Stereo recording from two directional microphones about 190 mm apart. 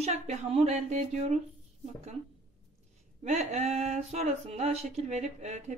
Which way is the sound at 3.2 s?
35° right (ahead or behind).